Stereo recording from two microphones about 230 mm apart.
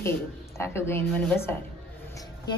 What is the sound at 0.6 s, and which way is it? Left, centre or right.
A woman's voice, centre.